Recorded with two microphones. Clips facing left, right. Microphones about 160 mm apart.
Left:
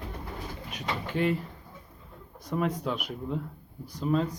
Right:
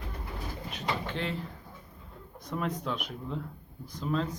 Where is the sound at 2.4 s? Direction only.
5° left (ahead or behind).